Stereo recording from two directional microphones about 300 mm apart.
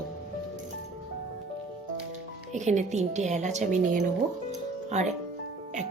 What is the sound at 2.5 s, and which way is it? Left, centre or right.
Speech, right.